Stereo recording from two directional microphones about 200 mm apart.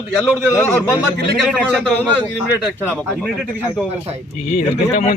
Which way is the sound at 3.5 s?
10° right (ahead or behind).